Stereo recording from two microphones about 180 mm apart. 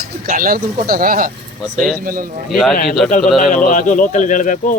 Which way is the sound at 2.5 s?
Centre (ahead or behind).